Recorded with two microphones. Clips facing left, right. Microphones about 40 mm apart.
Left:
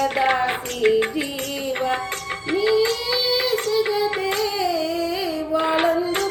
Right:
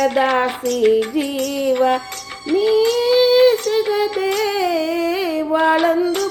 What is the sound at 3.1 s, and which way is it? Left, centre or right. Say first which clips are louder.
Child singing: right 12 dB; right.